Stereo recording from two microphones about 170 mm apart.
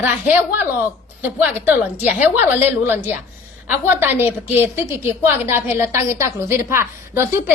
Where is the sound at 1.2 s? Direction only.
10° right (ahead or behind).